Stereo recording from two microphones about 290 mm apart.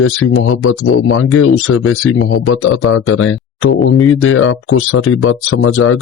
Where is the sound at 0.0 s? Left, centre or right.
Left.